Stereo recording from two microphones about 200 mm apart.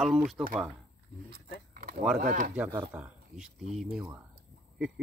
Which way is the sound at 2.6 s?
10° right (ahead or behind).